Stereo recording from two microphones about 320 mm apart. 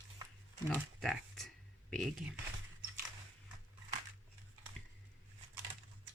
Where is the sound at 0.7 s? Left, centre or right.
Centre.